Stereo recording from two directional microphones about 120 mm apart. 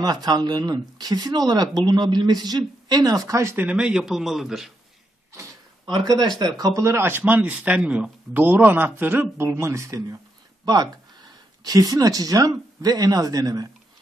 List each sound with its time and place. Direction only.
0.0 s speech: 35° right (ahead or behind)
3.5 s speech: 10° right (ahead or behind)
5.9 s speech: 35° right (ahead or behind)